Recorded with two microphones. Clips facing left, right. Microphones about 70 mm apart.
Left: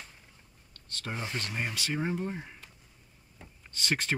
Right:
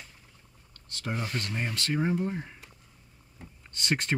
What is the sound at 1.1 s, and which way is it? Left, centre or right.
Speech, centre.